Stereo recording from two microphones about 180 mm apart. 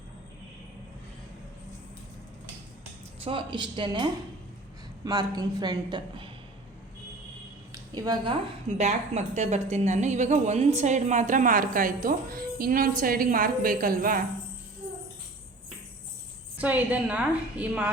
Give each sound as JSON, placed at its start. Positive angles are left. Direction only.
{"t": 3.2, "sound": "a woman's voice", "side_deg": -25}
{"t": 7.7, "sound": "a sound", "side_deg": -20}
{"t": 8.8, "sound": "a woman's voice", "side_deg": -40}
{"t": 16.6, "sound": "a woman's voice", "side_deg": -10}